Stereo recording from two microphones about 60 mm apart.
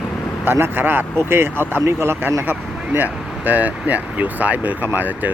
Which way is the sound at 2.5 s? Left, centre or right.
Right.